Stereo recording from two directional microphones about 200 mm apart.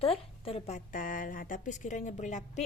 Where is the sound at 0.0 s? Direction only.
30° left (ahead or behind).